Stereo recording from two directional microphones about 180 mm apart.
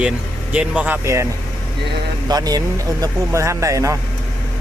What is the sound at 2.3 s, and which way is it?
Speech, 20° right (ahead or behind).